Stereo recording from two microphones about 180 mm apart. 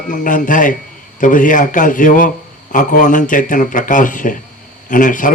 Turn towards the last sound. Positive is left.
turn(degrees=45)  # may be behind; listen again after turning